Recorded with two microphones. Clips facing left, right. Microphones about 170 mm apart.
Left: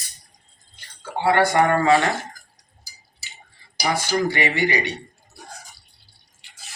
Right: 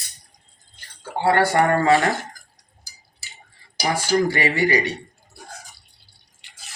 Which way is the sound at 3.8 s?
40° right (ahead or behind).